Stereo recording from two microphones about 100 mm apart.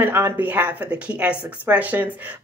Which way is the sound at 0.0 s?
20° right (ahead or behind).